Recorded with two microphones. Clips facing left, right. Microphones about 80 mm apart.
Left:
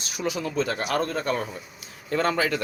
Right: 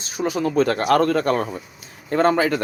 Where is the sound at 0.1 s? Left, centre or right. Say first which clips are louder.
Right 7 dB; right.